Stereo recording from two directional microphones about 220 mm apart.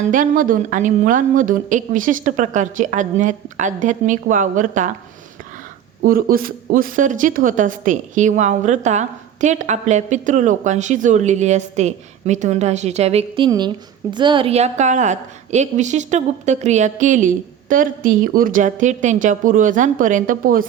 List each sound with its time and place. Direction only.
0.0 s speech: 35° right (ahead or behind)
6.0 s speech: 40° right (ahead or behind)